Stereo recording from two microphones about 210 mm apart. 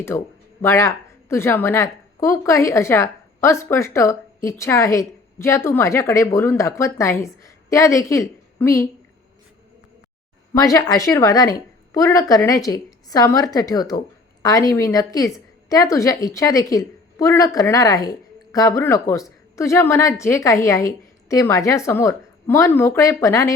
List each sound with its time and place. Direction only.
0.6 s a woman's voice: 15° left (ahead or behind)
10.5 s a woman's voice: 15° left (ahead or behind)